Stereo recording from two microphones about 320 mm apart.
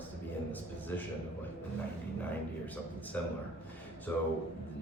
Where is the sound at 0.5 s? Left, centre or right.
Centre.